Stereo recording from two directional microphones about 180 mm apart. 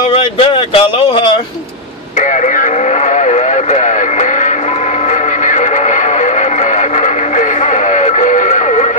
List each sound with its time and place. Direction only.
0.1 s speech: 30° left (ahead or behind)
2.1 s radio: 45° left (ahead or behind)
5.4 s music: 45° left (ahead or behind)